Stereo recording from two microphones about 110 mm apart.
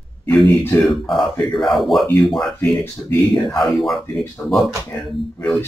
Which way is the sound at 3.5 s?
Centre (ahead or behind).